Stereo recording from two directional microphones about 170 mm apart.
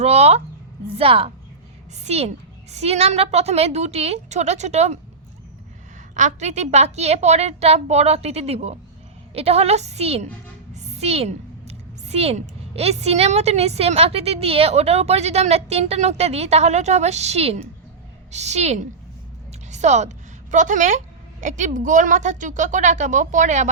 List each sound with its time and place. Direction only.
0.0 s a woman's voice: 40° right (ahead or behind)
6.1 s a woman's voice: 45° right (ahead or behind)